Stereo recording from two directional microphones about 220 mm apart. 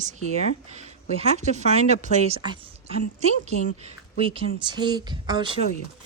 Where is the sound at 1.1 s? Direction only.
30° right (ahead or behind).